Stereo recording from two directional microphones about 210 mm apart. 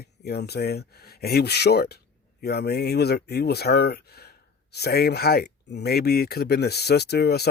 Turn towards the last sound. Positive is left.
turn(degrees=50)  # may be behind; listen again after turning